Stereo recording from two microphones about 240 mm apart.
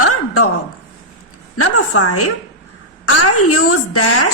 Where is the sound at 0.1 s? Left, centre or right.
Left.